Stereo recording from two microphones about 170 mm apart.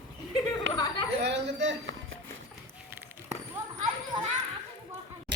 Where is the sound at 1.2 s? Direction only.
90° right.